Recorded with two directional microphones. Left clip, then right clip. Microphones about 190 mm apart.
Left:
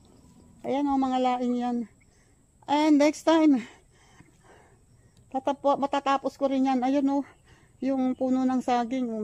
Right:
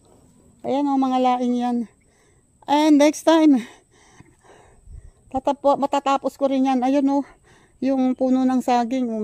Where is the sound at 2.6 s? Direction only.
55° right (ahead or behind).